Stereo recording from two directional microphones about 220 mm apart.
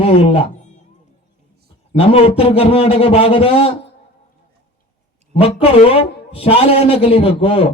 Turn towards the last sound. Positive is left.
turn(degrees=25)  # may be behind; listen again after turning